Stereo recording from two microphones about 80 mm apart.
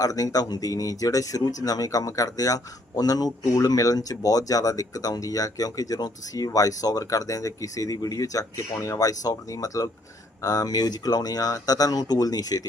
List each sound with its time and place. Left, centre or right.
0.0 s speech: left